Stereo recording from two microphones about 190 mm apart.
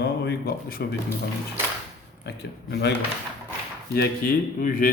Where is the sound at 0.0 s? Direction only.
55° left (ahead or behind).